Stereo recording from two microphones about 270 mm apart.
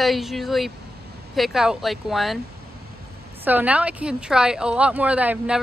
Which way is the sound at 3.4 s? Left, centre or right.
Centre.